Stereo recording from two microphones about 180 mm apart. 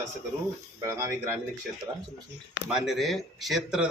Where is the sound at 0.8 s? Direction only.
15° right (ahead or behind).